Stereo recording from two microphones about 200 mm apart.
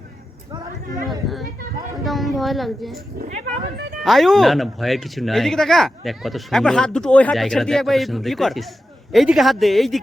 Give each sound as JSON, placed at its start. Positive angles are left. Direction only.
{"t": 2.0, "sound": "speech", "side_deg": 0}
{"t": 3.2, "sound": "speech", "side_deg": -35}
{"t": 4.0, "sound": "speech", "side_deg": 0}